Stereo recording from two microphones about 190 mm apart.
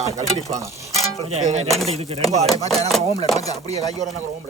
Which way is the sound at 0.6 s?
15° right (ahead or behind).